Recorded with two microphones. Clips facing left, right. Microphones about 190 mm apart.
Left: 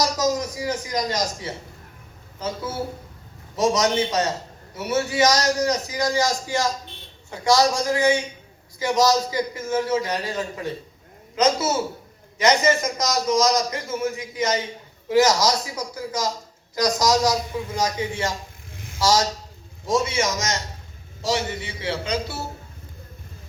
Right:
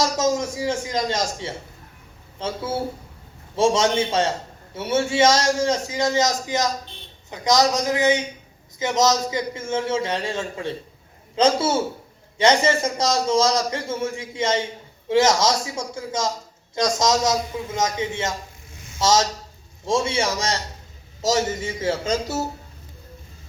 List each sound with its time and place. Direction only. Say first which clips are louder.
0.0 s a man's voice: right 1 dB; 25° right (ahead or behind)
21.2 s a man's voice: right 3 dB; 40° right (ahead or behind)